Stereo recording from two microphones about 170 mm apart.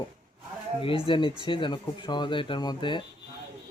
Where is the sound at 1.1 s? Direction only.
30° left (ahead or behind).